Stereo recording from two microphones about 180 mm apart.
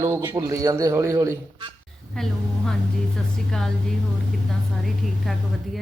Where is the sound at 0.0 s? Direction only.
15° right (ahead or behind).